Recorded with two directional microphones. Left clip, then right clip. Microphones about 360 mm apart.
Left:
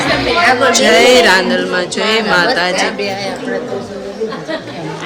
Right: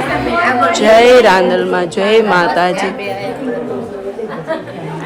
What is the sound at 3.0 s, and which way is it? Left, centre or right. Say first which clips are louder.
Speech: left 2 dB; left.